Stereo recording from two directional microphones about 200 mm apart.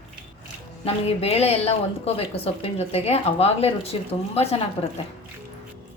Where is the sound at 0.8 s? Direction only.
30° left (ahead or behind).